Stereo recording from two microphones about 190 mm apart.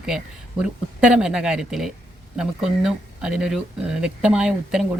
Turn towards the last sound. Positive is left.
turn(degrees=-5)  # may be behind; listen again after turning